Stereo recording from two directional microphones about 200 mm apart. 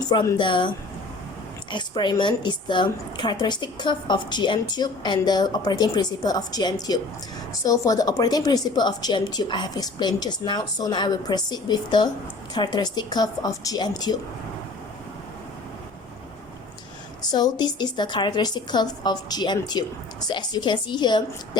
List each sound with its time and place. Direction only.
0.1 s a woman's voice: 20° left (ahead or behind)
1.7 s a woman's voice: 25° left (ahead or behind)
17.3 s a woman's voice: 20° left (ahead or behind)